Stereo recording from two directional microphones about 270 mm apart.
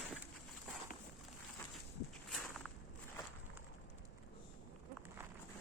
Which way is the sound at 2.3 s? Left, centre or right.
Centre.